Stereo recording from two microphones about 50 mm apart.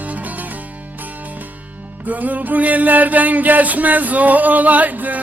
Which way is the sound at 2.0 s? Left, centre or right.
Right.